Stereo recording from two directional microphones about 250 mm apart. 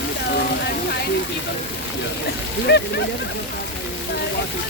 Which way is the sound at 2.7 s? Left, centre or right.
Left.